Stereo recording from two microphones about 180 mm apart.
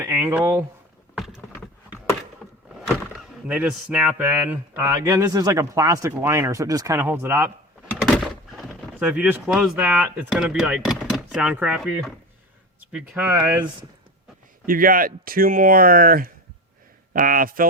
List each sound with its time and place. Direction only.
0.0 s speech: 10° right (ahead or behind)
1.1 s rowboat: centre (ahead or behind)
2.9 s speech: 5° right (ahead or behind)
8.0 s speech: centre (ahead or behind)
14.7 s speech: 50° right (ahead or behind)